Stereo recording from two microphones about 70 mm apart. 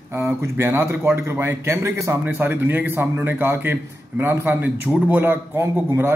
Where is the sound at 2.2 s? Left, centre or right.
Right.